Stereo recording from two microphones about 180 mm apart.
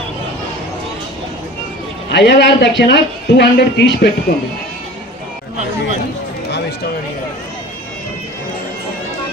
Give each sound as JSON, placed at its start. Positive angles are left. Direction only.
{"t": 2.0, "sound": "a man's voice", "side_deg": 75}